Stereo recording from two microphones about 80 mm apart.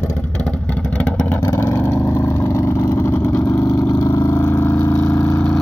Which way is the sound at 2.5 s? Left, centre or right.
Left.